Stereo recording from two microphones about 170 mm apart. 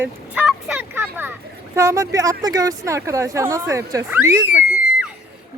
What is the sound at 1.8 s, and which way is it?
Speech, 15° right (ahead or behind).